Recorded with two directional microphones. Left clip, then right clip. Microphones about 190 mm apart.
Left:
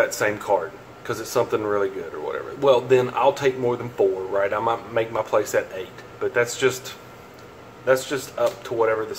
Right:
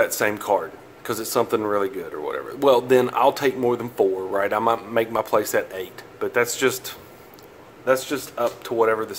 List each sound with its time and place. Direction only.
0.0 s a man's voice: 40° right (ahead or behind)
8.7 s a man's voice: 55° right (ahead or behind)